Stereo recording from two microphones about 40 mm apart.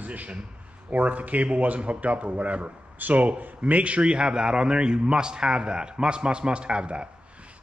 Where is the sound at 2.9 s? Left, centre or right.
Right.